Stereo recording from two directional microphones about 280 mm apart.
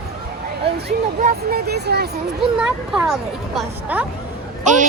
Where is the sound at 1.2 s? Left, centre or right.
Right.